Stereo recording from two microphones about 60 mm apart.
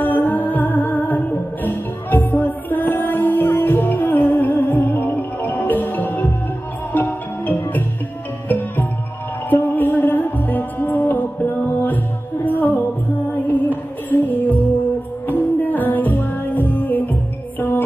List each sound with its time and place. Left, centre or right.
0.0 s music: left
14.2 s music: left